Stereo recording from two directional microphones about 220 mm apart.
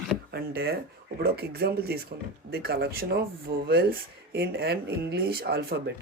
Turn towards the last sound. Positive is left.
turn(degrees=-45)  # may be behind; listen again after turning